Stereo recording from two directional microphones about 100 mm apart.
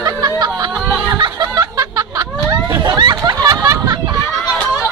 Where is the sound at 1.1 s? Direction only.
45° right (ahead or behind).